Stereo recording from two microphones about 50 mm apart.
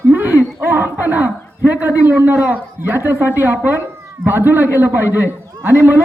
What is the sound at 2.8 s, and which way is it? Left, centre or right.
A woman's voice, right.